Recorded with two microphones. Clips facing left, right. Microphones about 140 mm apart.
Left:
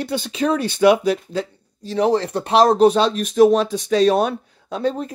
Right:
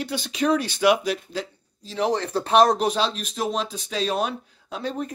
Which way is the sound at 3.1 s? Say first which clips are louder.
Left 13 dB; 55° left (ahead or behind).